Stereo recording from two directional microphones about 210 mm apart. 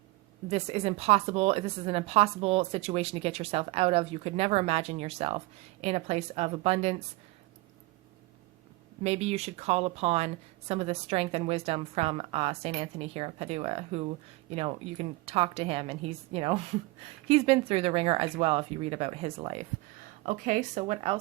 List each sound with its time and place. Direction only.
0.5 s a woman's voice: 30° right (ahead or behind)
9.0 s a woman's voice: 30° right (ahead or behind)